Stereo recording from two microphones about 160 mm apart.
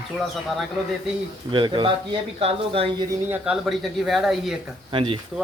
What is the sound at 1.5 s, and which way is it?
Speech, 30° right (ahead or behind).